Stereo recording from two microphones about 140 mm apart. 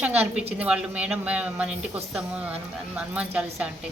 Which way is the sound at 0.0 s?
10° right (ahead or behind).